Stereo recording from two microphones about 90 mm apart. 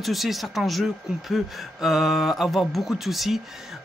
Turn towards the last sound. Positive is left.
turn(degrees=0)  # may be behind; listen again after turning